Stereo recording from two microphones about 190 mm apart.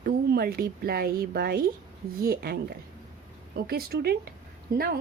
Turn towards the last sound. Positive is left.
turn(degrees=-55)  # may be behind; listen again after turning